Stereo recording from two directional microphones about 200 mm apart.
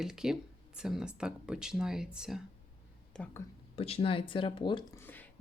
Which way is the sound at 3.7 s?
30° left (ahead or behind).